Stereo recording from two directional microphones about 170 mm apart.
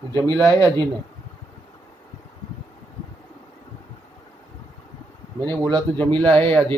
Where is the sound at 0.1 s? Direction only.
15° left (ahead or behind).